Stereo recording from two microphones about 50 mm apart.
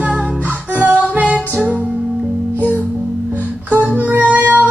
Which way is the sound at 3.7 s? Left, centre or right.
Right.